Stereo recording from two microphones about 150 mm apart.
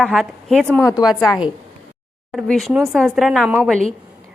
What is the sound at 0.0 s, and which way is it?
Speech, centre (ahead or behind).